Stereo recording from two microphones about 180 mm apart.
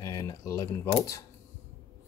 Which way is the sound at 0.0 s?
20° left (ahead or behind).